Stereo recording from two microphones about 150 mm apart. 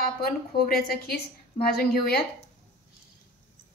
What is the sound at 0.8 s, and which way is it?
A woman's voice, 90° left.